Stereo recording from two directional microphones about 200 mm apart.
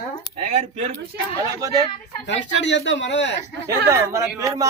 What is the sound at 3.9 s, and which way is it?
Speech, 15° right (ahead or behind).